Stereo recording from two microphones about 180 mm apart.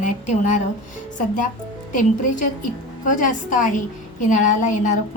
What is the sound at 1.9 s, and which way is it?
A woman's voice, 45° left (ahead or behind).